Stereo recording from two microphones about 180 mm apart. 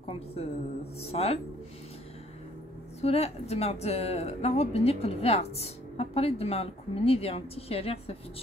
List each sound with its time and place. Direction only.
0.0 s a woman's voice: 30° left (ahead or behind)
3.0 s speech: 35° left (ahead or behind)